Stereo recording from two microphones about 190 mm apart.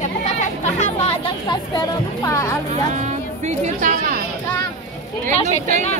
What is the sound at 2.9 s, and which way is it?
Speech, 40° right (ahead or behind).